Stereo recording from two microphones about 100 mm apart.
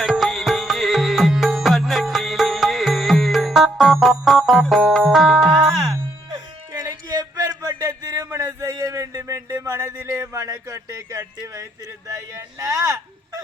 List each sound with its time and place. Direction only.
0.0 s music: 5° right (ahead or behind)
6.7 s music: 45° right (ahead or behind)
7.4 s a sound: 25° right (ahead or behind)
8.4 s speech: 40° right (ahead or behind)